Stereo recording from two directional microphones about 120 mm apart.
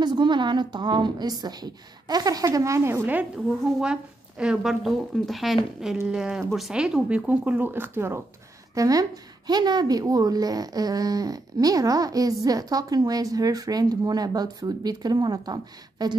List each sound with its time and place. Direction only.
0.0 s speech: 40° right (ahead or behind); by 3.3 s 20° right (ahead or behind)
3.4 s a woman's voice: 5° right (ahead or behind)
8.7 s a woman's voice: 30° right (ahead or behind)